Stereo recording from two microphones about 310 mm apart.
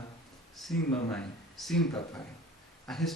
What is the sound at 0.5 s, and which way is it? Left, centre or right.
Speech, centre.